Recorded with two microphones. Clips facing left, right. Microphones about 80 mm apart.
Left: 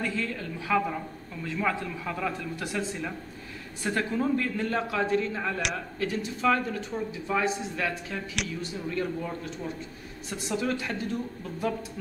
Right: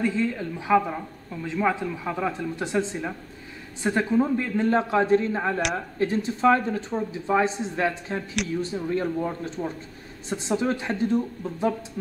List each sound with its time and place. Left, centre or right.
0.0 s speech: right